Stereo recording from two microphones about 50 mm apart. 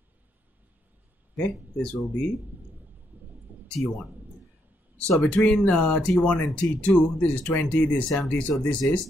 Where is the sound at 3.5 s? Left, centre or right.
Right.